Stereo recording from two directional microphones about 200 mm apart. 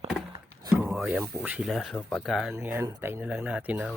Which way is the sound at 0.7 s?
10° right (ahead or behind).